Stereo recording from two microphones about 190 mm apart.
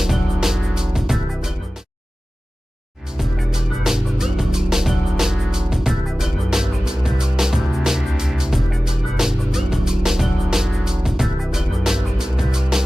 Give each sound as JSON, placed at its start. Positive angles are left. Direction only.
{"t": 0.0, "sound": "music", "side_deg": 0}
{"t": 3.2, "sound": "music", "side_deg": -5}